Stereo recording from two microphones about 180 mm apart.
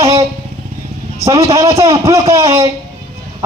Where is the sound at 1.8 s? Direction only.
15° right (ahead or behind).